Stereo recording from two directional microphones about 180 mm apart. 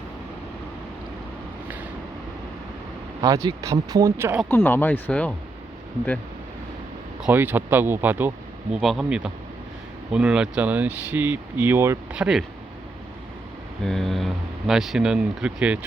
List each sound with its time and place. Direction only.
3.2 s speech: 20° right (ahead or behind)
4.4 s speech: 10° left (ahead or behind)
7.2 s speech: 10° right (ahead or behind)
13.8 s speech: centre (ahead or behind)